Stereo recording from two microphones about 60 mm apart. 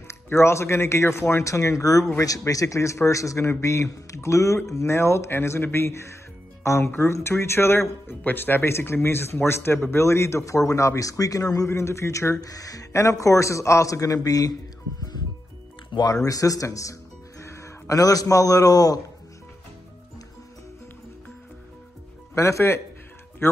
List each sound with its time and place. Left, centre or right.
0.1 s a man's voice: left
4.9 s a man's voice: left
12.4 s speech: left
12.9 s a man's voice: left
16.3 s a man's voice: left
22.3 s a man's voice: left
23.4 s speech: left